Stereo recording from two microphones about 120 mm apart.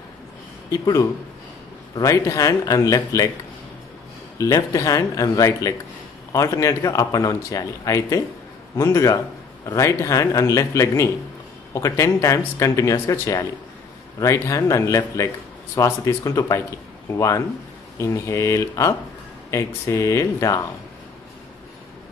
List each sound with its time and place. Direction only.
0.7 s speech: 30° left (ahead or behind)
4.4 s speech: 25° left (ahead or behind)